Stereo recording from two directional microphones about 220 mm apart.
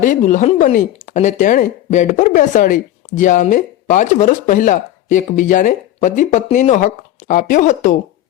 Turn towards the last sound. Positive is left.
turn(degrees=35)  # may be behind; listen again after turning